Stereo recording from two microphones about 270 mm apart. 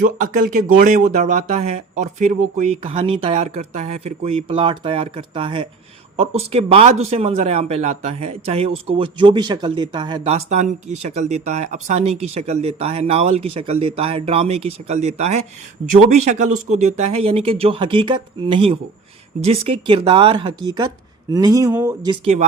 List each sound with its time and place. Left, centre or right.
0.5 s speech: right